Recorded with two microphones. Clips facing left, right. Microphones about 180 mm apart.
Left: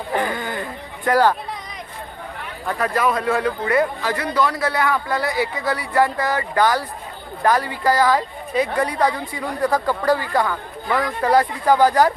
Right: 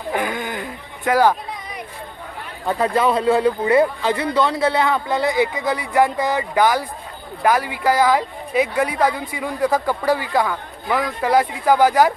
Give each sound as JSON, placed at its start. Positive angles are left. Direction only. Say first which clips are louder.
{"t": 0.1, "sound": "speech", "louder": "even", "side_deg": -10}
{"t": 2.6, "sound": "speech", "louder": "right 3 dB", "side_deg": -25}